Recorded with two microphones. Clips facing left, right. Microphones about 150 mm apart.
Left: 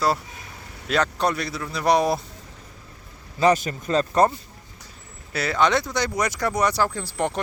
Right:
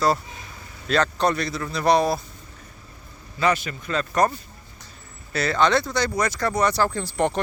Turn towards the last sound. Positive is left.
turn(degrees=5)  # may be behind; listen again after turning